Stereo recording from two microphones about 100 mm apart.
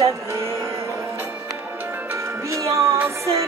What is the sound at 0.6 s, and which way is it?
Music, 25° right (ahead or behind).